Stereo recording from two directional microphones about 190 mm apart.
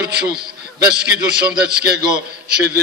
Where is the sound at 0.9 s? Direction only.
5° right (ahead or behind).